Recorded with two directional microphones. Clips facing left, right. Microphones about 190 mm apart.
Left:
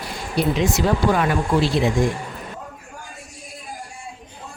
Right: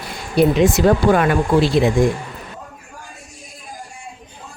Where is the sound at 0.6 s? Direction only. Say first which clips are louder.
Right 5 dB; 55° right (ahead or behind).